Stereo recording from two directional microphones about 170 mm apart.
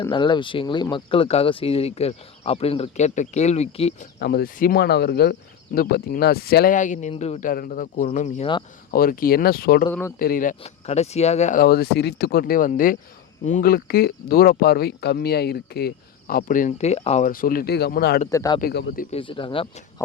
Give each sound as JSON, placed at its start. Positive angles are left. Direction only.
{"t": 0.1, "sound": "speech", "side_deg": 25}
{"t": 4.2, "sound": "speech", "side_deg": 65}
{"t": 6.7, "sound": "speech", "side_deg": 45}
{"t": 7.5, "sound": "speech", "side_deg": 55}
{"t": 8.9, "sound": "speech", "side_deg": 60}
{"t": 10.6, "sound": "speech", "side_deg": 40}
{"t": 11.6, "sound": "speech", "side_deg": 65}
{"t": 17.3, "sound": "speech", "side_deg": 55}
{"t": 18.3, "sound": "speech", "side_deg": 20}
{"t": 18.6, "sound": "speech", "side_deg": 80}
{"t": 19.1, "sound": "speech", "side_deg": 30}